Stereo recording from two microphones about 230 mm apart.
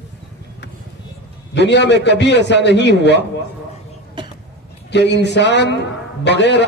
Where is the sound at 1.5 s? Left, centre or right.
Left.